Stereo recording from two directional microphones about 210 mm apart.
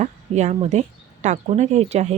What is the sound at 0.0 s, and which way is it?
Speech, 35° right (ahead or behind).